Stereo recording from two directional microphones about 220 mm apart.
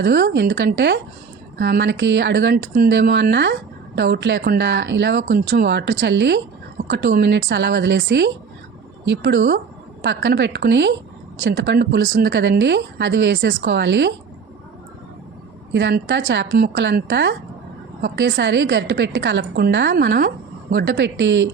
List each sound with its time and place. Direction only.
0.0 s speech: 50° right (ahead or behind)
15.7 s speech: 55° right (ahead or behind)